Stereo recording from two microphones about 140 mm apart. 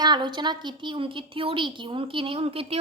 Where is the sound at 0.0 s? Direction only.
30° right (ahead or behind).